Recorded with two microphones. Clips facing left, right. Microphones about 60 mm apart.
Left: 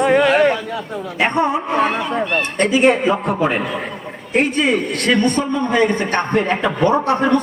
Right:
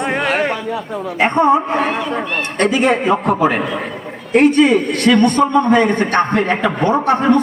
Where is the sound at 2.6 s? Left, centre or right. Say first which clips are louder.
Even; right.